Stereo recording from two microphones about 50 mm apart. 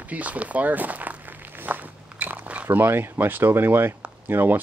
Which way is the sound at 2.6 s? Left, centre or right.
Right.